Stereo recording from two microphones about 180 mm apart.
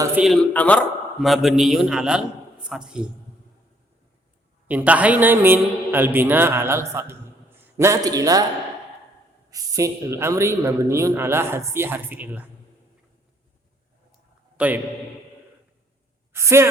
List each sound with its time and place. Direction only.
0.2 s a man's voice: 5° right (ahead or behind)
0.5 s a man's voice: 5° left (ahead or behind)
4.7 s a man's voice: 10° right (ahead or behind)
9.5 s a man's voice: 20° right (ahead or behind)
14.6 s a man's voice: 5° right (ahead or behind)
16.3 s a woman's voice: 15° right (ahead or behind)